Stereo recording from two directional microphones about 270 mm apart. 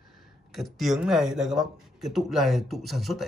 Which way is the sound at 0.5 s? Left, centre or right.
Centre.